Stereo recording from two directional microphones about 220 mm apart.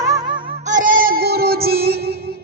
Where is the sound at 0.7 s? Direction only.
40° right (ahead or behind).